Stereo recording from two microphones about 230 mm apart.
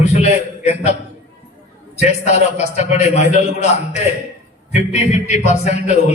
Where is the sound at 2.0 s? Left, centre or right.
Left.